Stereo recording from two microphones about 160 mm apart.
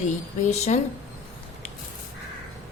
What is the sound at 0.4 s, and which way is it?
Speech, 50° left (ahead or behind).